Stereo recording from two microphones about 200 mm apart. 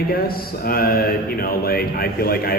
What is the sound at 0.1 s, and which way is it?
Speech, 50° left (ahead or behind).